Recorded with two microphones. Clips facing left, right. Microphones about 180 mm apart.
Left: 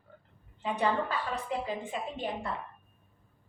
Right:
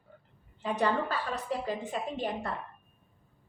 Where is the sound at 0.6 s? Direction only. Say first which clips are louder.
Right 1 dB; 40° right (ahead or behind).